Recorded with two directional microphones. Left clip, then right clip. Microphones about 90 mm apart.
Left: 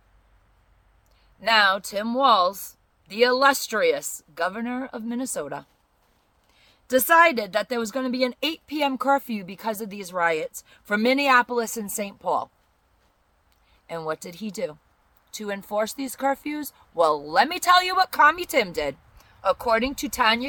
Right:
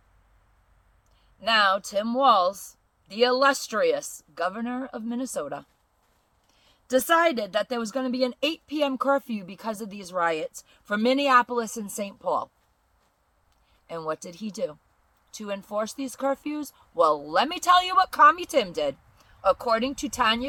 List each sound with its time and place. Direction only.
1.4 s a woman's voice: 35° left (ahead or behind)
13.8 s a woman's voice: 30° left (ahead or behind)